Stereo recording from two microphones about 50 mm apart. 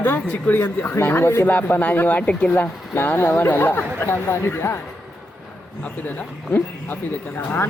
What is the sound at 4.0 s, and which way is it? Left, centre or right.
Speech, left.